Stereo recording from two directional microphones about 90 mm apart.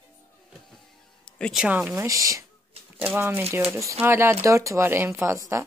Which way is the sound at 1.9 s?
35° right (ahead or behind).